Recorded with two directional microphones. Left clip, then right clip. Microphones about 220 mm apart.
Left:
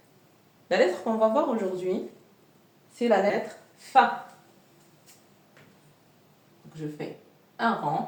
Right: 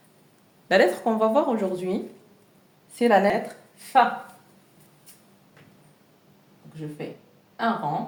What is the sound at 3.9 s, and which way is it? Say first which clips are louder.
Speech: right 1 dB; 35° right (ahead or behind).